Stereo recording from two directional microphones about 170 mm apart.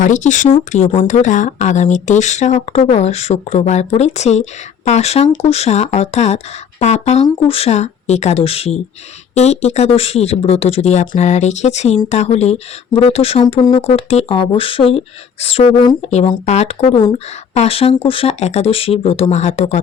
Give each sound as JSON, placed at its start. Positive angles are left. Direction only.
{"t": 0.0, "sound": "speech", "side_deg": 45}
{"t": 16.0, "sound": "speech", "side_deg": 40}